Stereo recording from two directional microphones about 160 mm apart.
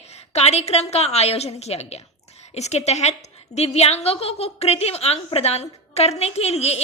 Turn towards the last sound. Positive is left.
turn(degrees=40)  # may be behind; listen again after turning